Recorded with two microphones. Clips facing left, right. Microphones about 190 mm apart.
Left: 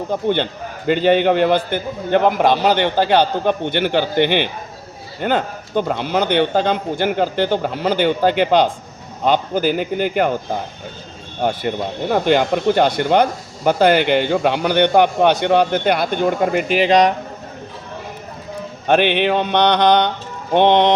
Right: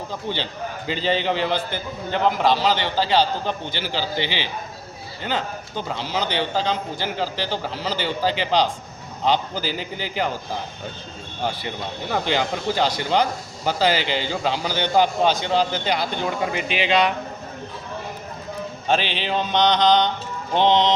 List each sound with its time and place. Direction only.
0.1 s a man's voice: 55° left (ahead or behind); by 17.2 s 40° left (ahead or behind)
18.9 s a man's voice: 60° left (ahead or behind)